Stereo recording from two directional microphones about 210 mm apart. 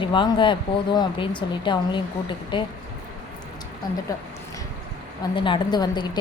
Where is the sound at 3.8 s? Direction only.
20° left (ahead or behind).